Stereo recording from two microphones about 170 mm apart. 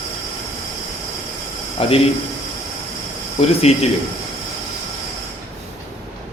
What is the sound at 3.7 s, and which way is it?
Speech, 35° left (ahead or behind).